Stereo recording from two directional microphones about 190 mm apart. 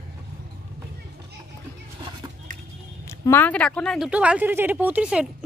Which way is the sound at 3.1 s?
10° left (ahead or behind).